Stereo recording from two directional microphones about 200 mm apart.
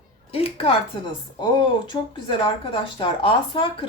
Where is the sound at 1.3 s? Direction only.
20° left (ahead or behind).